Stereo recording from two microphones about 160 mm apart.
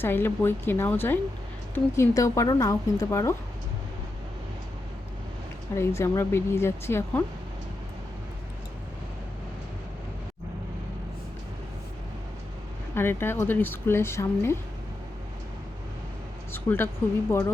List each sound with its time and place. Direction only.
0.0 s speech: 15° left (ahead or behind)
5.7 s speech: 15° left (ahead or behind)
12.9 s speech: 15° left (ahead or behind)
16.5 s speech: 15° left (ahead or behind)